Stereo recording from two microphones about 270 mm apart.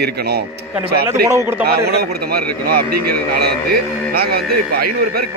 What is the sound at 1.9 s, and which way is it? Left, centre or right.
Speech, right.